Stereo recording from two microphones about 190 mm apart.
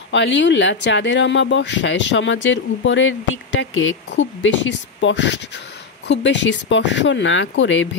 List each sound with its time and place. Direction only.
0.1 s speech: 70° left (ahead or behind)